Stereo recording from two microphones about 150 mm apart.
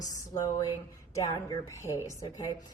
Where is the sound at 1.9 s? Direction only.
20° left (ahead or behind).